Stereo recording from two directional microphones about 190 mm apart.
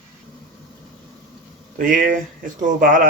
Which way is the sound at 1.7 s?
45° right (ahead or behind).